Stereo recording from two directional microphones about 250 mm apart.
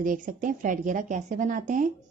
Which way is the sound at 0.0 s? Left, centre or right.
Right.